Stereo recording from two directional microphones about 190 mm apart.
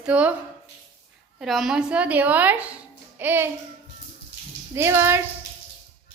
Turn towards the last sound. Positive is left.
turn(degrees=-15)  # may be behind; listen again after turning